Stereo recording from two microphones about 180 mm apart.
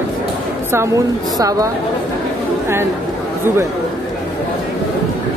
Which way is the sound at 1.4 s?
20° right (ahead or behind).